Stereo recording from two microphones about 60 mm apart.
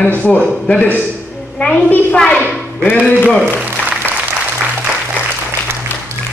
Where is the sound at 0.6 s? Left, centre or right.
Centre.